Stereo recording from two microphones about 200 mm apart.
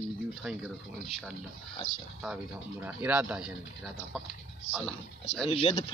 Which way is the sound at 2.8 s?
10° right (ahead or behind).